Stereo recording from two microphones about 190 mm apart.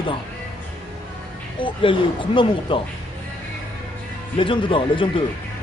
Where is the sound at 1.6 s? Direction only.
25° left (ahead or behind).